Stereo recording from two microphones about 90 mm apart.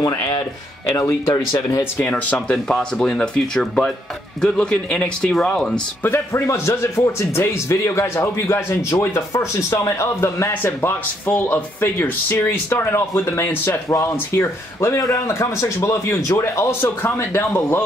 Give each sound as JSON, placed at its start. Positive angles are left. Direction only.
{"t": 0.1, "sound": "a man's voice", "side_deg": 35}
{"t": 1.8, "sound": "speech", "side_deg": 20}
{"t": 2.3, "sound": "speech", "side_deg": 10}
{"t": 6.0, "sound": "a man's voice", "side_deg": 30}